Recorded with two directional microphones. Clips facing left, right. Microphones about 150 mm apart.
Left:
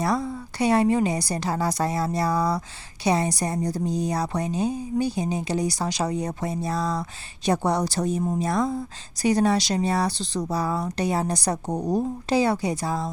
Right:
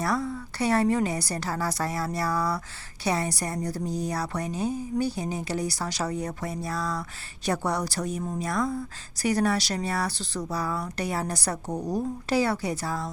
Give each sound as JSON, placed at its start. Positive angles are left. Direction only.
{"t": 0.0, "sound": "a woman's voice", "side_deg": 15}